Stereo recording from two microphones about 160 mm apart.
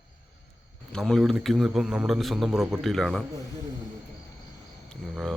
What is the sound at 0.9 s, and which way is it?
A man's voice, centre (ahead or behind).